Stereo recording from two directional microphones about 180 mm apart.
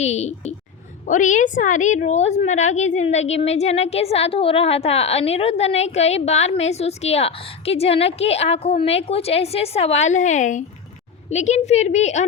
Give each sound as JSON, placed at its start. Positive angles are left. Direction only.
{"t": 0.0, "sound": "a woman's voice", "side_deg": 40}